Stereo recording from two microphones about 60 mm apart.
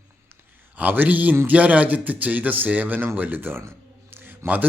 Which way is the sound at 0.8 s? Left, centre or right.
Right.